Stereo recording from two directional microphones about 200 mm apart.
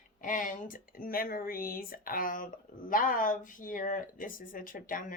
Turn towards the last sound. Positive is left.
turn(degrees=45)  # may be behind; listen again after turning